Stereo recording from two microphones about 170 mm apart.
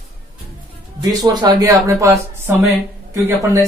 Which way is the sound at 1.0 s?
20° right (ahead or behind).